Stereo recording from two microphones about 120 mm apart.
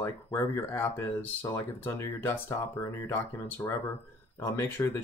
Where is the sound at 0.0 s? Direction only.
25° left (ahead or behind).